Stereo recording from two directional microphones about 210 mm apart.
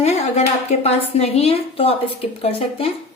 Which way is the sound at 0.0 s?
30° left (ahead or behind).